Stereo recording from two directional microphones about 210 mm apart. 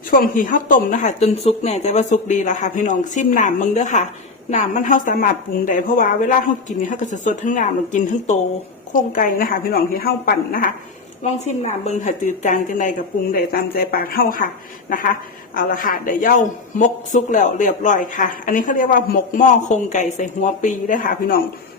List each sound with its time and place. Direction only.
0.1 s a woman's voice: 40° left (ahead or behind)
11.2 s a woman's voice: 35° left (ahead or behind)